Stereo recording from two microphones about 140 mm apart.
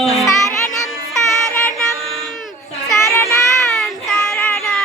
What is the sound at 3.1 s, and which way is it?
Child singing, 15° left (ahead or behind).